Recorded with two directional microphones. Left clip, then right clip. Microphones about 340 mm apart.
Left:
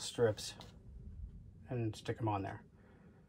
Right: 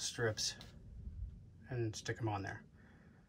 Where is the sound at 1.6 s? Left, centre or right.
Centre.